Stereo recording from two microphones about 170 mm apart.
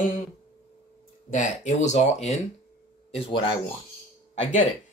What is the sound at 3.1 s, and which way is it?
Speech, 30° left (ahead or behind).